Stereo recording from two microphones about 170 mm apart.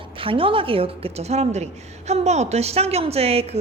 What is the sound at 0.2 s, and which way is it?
A woman's voice, 30° right (ahead or behind).